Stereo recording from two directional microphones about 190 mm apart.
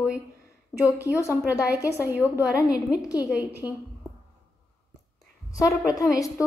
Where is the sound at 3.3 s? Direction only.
10° right (ahead or behind).